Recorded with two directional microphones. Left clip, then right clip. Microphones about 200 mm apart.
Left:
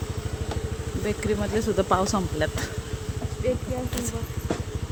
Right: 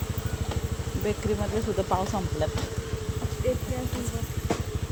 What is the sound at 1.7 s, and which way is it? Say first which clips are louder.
Speech: left 5 dB; 25° left (ahead or behind).